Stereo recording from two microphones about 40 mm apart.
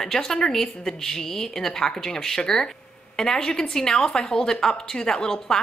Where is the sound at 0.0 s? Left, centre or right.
Centre.